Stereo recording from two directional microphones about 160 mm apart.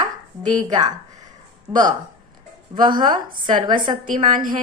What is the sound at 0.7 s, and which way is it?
Speech, 25° right (ahead or behind).